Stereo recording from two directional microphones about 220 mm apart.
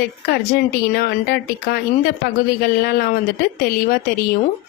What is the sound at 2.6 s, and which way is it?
Speech, 45° left (ahead or behind).